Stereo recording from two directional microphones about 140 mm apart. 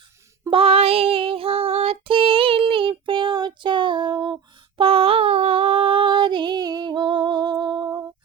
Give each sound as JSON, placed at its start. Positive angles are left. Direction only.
{"t": 0.5, "sound": "female singing", "side_deg": -45}
{"t": 4.8, "sound": "humming", "side_deg": -40}